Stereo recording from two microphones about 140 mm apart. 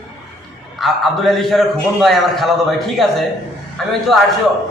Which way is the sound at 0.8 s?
Centre (ahead or behind).